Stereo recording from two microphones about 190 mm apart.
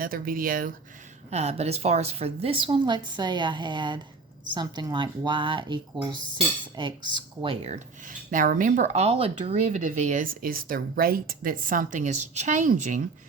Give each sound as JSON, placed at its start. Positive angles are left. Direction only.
{"t": 0.0, "sound": "speech", "side_deg": -50}
{"t": 1.3, "sound": "a woman's voice", "side_deg": -35}
{"t": 8.3, "sound": "speech", "side_deg": -45}